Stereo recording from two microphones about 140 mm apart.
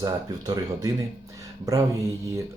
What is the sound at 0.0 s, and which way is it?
Speech, 30° right (ahead or behind).